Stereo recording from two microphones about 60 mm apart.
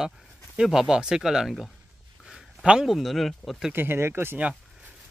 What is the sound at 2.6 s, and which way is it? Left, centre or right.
Speech, centre.